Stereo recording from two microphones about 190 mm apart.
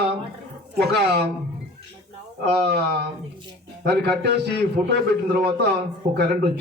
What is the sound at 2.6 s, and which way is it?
A man's voice, 60° right (ahead or behind).